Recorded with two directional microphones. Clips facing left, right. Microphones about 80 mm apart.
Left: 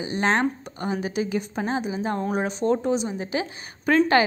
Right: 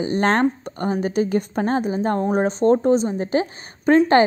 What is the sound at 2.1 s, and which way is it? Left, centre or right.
A woman's voice, right.